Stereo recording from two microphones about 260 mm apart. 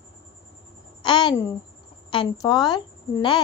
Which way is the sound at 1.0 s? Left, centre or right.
Centre.